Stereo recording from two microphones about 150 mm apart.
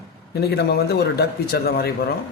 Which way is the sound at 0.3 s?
90° left.